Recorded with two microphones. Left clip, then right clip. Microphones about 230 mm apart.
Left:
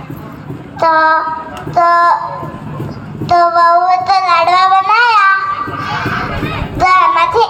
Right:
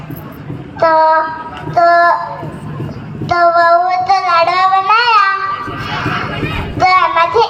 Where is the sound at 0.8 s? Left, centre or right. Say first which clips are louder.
Even; left.